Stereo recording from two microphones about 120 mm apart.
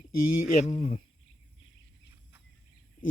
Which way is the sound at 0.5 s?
65° left (ahead or behind).